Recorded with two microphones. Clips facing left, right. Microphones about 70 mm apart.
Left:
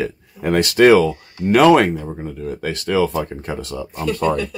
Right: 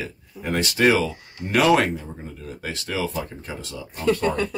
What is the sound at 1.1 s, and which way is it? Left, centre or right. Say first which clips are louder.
Speech: left 8 dB; right.